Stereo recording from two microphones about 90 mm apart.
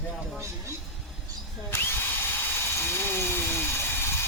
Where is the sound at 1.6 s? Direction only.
25° left (ahead or behind).